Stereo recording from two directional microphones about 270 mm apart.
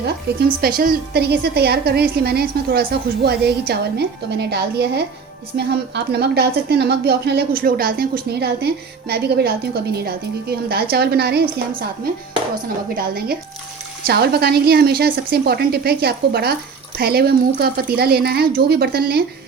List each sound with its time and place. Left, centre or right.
0.3 s a woman's voice: right
13.0 s a woman's voice: right